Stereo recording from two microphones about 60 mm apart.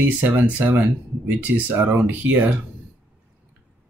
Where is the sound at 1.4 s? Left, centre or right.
Right.